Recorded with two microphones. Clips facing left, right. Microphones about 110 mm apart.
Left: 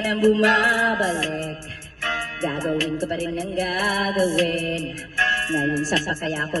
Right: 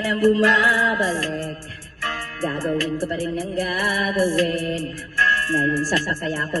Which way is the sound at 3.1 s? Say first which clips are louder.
Right 1 dB; 10° right (ahead or behind).